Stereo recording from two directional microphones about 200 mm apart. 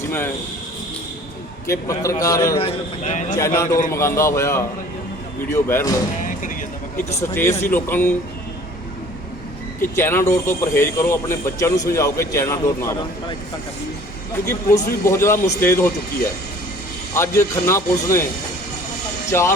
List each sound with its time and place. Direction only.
1.6 s speech: 15° left (ahead or behind)
2.6 s a man's voice: 35° left (ahead or behind)
3.3 s speech: 15° left (ahead or behind)
7.1 s speech: 15° left (ahead or behind)
9.9 s speech: 10° left (ahead or behind)
14.4 s speech: 15° left (ahead or behind)
17.2 s speech: 15° left (ahead or behind)
19.3 s speech: 15° left (ahead or behind)